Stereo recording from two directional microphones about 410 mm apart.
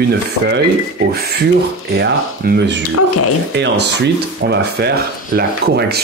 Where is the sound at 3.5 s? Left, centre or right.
Right.